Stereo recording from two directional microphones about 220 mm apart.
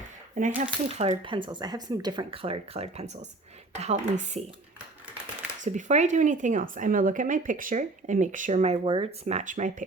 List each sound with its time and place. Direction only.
0.3 s speech: 35° right (ahead or behind)
5.6 s speech: 35° right (ahead or behind)